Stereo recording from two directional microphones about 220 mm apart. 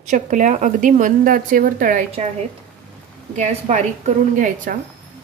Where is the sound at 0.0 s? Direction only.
35° right (ahead or behind).